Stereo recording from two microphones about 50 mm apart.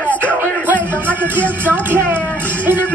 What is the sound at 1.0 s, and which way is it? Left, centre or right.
Music, right.